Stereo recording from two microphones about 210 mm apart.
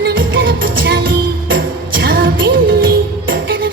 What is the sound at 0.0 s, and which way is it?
Music, 65° right (ahead or behind).